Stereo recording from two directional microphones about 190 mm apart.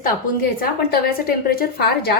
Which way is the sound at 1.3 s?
50° left (ahead or behind).